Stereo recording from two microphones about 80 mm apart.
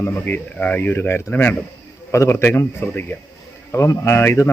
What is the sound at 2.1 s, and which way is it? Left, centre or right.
Speech, left.